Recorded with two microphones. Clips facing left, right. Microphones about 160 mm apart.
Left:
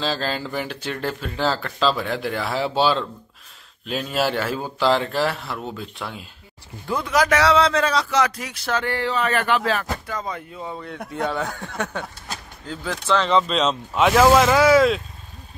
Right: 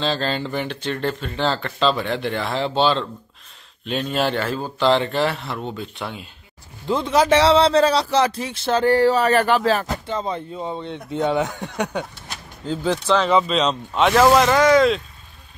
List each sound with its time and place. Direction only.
0.0 s speech: 5° left (ahead or behind)
6.9 s speech: 25° right (ahead or behind); by 15.0 s 5° left (ahead or behind)